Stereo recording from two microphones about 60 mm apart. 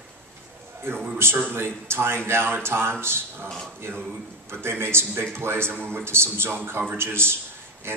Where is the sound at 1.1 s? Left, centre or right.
Right.